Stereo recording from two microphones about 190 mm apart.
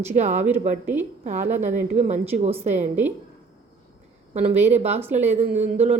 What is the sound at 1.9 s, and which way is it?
Speech, 35° right (ahead or behind).